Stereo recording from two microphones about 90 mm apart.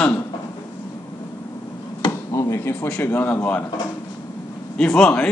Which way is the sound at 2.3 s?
35° left (ahead or behind).